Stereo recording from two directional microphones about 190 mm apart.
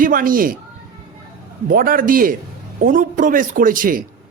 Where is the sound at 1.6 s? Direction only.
50° right (ahead or behind).